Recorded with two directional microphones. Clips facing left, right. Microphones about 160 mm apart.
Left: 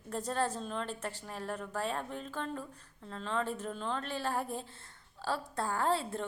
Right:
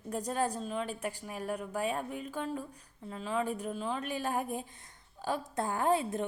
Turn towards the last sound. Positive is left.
turn(degrees=-15)  # may be behind; listen again after turning